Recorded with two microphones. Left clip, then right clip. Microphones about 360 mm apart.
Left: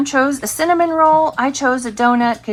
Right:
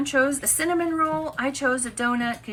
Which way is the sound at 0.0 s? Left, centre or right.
Centre.